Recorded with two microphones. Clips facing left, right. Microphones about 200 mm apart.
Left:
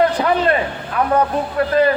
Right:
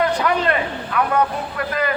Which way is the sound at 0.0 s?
30° left (ahead or behind).